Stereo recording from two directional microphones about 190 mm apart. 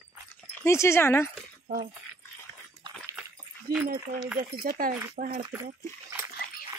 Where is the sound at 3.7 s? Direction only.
50° right (ahead or behind).